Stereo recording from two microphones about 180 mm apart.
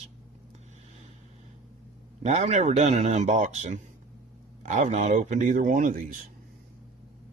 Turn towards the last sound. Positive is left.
turn(degrees=-50)  # may be behind; listen again after turning